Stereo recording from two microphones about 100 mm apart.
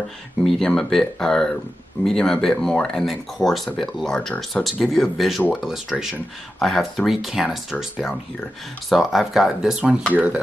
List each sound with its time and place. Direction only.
0.4 s speech: 5° left (ahead or behind)
8.8 s speech: centre (ahead or behind); by 10.4 s 15° right (ahead or behind)